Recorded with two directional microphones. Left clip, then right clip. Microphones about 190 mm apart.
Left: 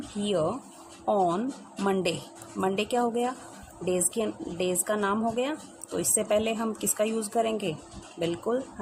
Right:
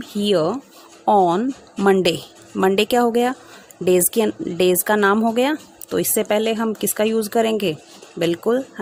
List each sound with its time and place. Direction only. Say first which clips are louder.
0.2 s speech: right 9 dB; 45° right (ahead or behind)